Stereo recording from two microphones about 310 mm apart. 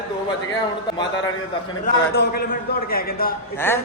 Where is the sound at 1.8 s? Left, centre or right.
Left.